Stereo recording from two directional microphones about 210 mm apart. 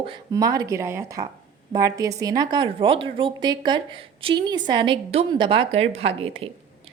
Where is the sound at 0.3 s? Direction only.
15° right (ahead or behind).